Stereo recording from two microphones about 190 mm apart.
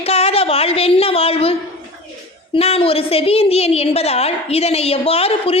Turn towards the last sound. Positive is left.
turn(degrees=30)  # may be behind; listen again after turning